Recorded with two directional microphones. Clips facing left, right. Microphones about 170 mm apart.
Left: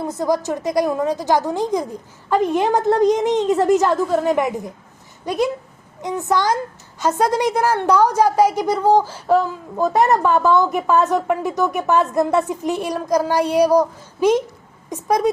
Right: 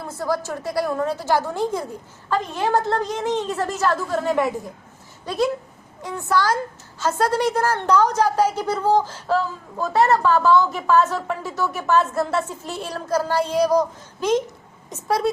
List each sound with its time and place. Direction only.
0.0 s a woman's voice: 20° left (ahead or behind)
5.2 s a sound: 15° left (ahead or behind)
6.0 s a child's voice: 20° left (ahead or behind)